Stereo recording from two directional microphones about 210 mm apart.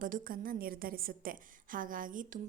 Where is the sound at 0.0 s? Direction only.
40° right (ahead or behind).